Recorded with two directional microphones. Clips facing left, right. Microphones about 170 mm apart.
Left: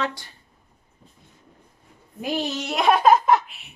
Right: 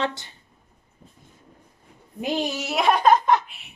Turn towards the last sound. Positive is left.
turn(degrees=0)  # may be behind; listen again after turning